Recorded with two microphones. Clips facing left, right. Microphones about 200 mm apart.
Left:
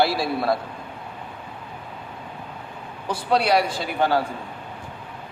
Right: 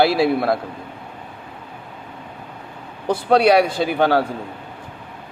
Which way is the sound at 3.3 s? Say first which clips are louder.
Right 6 dB; 60° right (ahead or behind).